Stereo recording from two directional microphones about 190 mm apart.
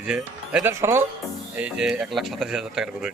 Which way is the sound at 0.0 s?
5° right (ahead or behind).